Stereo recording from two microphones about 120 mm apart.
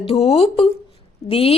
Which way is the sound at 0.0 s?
55° left (ahead or behind).